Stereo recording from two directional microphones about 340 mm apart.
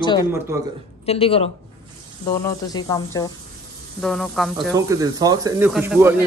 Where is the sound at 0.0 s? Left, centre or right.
Centre.